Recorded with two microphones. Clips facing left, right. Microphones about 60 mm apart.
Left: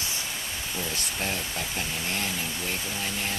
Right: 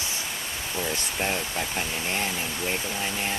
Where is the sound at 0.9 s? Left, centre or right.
Right.